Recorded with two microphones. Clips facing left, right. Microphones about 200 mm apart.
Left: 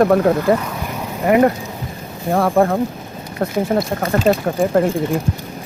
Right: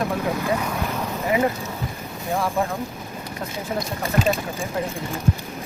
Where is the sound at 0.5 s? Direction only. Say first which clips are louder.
Left 6 dB; 60° left (ahead or behind).